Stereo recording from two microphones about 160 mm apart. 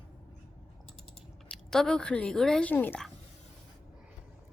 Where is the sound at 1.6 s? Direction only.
5° left (ahead or behind).